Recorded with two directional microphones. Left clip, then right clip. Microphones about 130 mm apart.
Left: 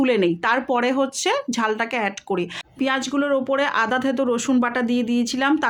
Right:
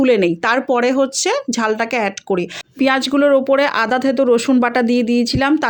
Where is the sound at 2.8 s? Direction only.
45° right (ahead or behind).